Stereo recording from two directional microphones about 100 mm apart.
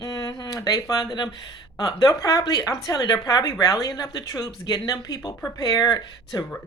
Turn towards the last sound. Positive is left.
turn(degrees=40)  # may be behind; listen again after turning